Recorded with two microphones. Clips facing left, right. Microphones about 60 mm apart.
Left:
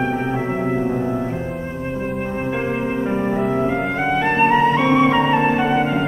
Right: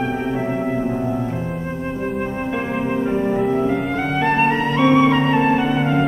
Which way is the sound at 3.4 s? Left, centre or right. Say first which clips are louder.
Right 1 dB; centre.